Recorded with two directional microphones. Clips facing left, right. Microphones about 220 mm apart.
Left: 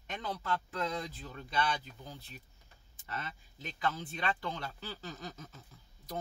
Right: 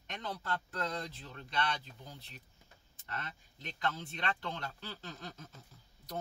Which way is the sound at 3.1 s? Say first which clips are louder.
Left 2 dB; 5° left (ahead or behind).